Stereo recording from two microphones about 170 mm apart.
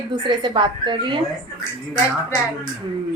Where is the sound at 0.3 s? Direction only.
30° right (ahead or behind).